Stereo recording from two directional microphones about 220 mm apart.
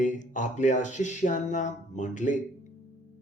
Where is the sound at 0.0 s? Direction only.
35° left (ahead or behind).